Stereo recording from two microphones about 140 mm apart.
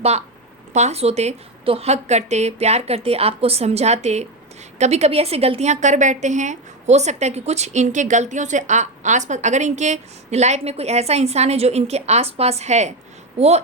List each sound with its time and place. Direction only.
0.0 s a woman's voice: 50° right (ahead or behind)